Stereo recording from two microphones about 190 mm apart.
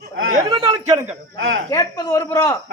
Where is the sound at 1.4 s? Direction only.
90° right.